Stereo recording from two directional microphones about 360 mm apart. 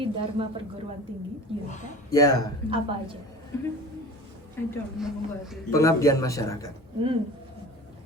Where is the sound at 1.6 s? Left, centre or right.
Centre.